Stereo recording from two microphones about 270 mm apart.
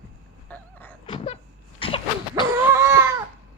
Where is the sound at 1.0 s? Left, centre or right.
Centre.